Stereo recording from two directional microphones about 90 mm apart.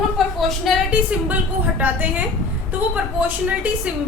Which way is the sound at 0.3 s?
Centre (ahead or behind).